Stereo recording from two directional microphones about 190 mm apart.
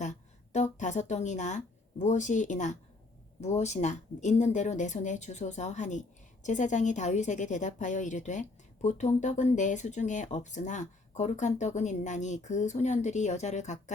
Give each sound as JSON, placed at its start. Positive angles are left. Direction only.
{"t": 0.0, "sound": "a woman's voice", "side_deg": 40}